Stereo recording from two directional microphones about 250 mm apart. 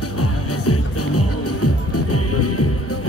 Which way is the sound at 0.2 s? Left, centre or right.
Left.